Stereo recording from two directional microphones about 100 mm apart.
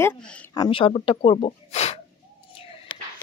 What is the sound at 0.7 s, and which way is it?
Speech, 60° left (ahead or behind).